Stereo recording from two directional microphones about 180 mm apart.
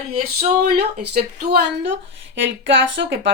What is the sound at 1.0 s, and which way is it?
Speech, 60° right (ahead or behind).